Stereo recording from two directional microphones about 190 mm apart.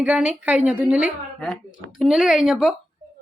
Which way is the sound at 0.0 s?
5° right (ahead or behind).